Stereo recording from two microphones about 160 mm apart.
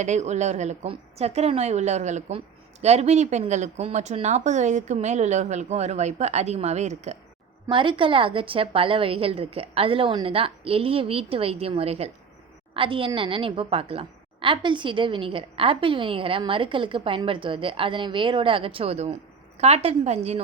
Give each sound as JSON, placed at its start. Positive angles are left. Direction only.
{"t": 0.0, "sound": "speech", "side_deg": -45}
{"t": 7.7, "sound": "a woman's voice", "side_deg": -30}